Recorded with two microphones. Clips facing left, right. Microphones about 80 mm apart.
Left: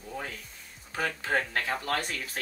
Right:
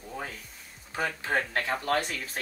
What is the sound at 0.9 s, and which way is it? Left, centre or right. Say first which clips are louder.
Speech: even; centre.